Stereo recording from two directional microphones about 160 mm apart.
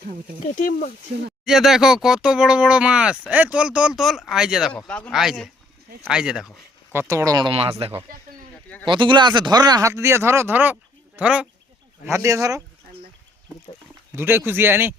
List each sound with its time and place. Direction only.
1.5 s speech: centre (ahead or behind)
7.1 s speech: 20° right (ahead or behind)
12.0 s speech: 20° right (ahead or behind)
14.2 s speech: 15° right (ahead or behind)